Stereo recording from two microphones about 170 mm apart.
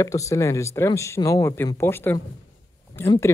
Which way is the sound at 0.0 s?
20° left (ahead or behind).